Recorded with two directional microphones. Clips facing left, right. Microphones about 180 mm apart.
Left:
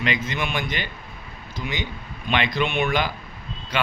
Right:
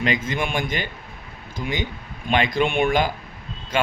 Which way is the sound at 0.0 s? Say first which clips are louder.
Right 2 dB; 45° right (ahead or behind).